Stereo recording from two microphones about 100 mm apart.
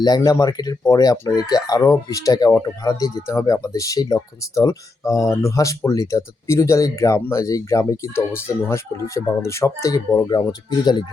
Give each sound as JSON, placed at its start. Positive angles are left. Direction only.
{"t": 0.2, "sound": "speech", "side_deg": 40}